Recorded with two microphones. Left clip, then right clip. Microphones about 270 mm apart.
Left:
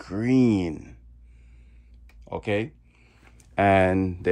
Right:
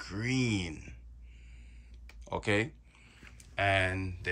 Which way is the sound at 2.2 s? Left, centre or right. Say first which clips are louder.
Left 4 dB; centre.